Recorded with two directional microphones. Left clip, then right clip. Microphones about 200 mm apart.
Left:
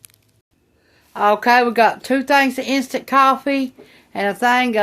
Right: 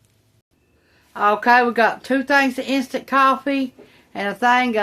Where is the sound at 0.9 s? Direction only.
30° left (ahead or behind).